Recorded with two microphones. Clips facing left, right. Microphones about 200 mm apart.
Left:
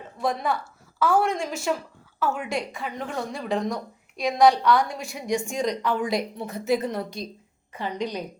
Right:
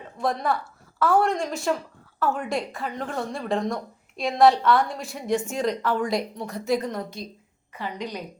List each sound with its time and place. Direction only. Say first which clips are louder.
0.2 s a woman's voice: right 1 dB; centre (ahead or behind); by 8.2 s 20° left (ahead or behind)